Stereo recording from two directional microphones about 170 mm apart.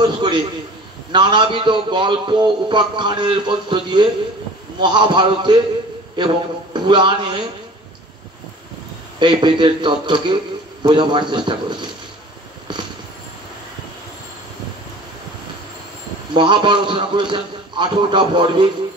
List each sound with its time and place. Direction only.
0.0 s a man's voice: 30° right (ahead or behind)
9.2 s a man's voice: 30° right (ahead or behind)
16.3 s a man's voice: 30° right (ahead or behind)